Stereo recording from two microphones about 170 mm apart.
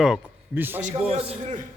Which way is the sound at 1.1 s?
40° right (ahead or behind).